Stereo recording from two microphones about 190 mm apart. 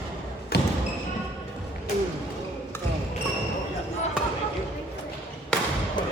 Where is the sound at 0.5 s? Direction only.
60° left (ahead or behind).